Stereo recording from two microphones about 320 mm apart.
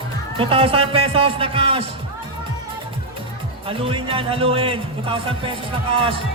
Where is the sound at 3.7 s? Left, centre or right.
Centre.